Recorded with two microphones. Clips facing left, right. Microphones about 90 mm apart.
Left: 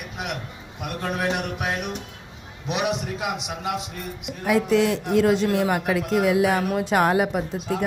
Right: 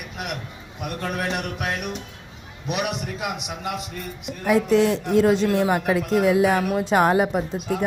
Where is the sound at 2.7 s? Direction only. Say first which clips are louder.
Left 1 dB; 25° left (ahead or behind).